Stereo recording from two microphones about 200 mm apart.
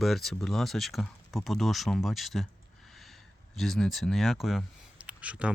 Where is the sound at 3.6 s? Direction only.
Centre (ahead or behind).